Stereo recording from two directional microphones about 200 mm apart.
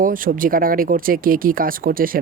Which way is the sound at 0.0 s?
45° right (ahead or behind).